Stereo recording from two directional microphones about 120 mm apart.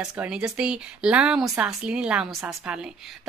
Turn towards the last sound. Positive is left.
turn(degrees=-5)  # may be behind; listen again after turning